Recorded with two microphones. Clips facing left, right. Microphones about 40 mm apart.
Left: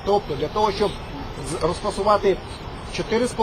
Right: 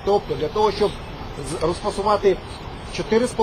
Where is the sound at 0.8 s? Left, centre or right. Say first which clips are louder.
Right 1 dB; centre.